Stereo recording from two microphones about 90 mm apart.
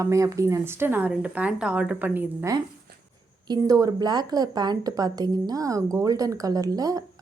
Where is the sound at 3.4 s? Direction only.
45° right (ahead or behind).